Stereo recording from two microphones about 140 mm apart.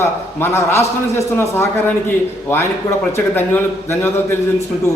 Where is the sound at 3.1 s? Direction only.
15° left (ahead or behind).